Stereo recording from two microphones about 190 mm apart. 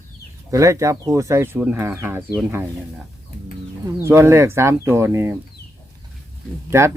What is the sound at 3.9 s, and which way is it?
Speech, 15° right (ahead or behind).